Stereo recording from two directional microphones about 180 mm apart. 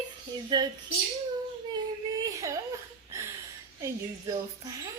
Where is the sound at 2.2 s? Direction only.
20° right (ahead or behind).